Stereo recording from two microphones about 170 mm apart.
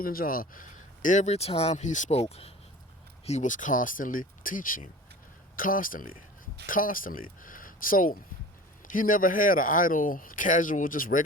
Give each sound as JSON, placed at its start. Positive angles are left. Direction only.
{"t": 0.0, "sound": "speech", "side_deg": 60}
{"t": 3.2, "sound": "speech", "side_deg": 45}